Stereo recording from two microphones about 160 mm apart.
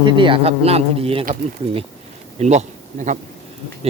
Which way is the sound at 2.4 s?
45° right (ahead or behind).